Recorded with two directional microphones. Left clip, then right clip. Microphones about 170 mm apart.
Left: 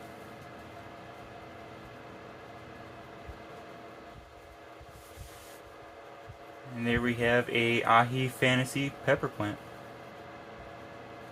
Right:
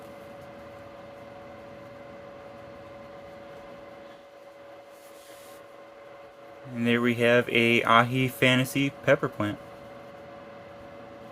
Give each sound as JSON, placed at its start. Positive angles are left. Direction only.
{"t": 6.8, "sound": "speech", "side_deg": -35}